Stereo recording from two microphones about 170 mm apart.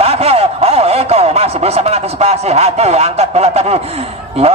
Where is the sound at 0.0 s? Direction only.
35° right (ahead or behind).